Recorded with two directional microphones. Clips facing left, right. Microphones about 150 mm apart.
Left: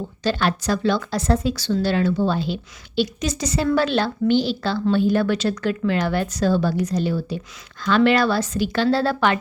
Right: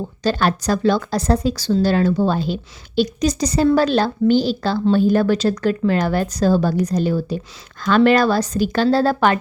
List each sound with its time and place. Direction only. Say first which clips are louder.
0.2 s speech: right 3 dB; 40° right (ahead or behind)